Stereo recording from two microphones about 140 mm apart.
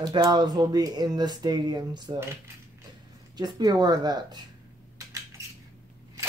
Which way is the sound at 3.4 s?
30° right (ahead or behind).